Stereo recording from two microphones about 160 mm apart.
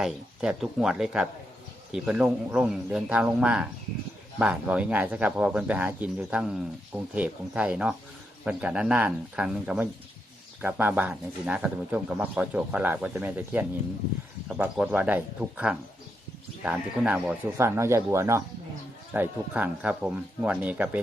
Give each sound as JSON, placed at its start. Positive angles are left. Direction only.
{"t": 0.0, "sound": "speech", "side_deg": -5}
{"t": 17.6, "sound": "speech", "side_deg": -15}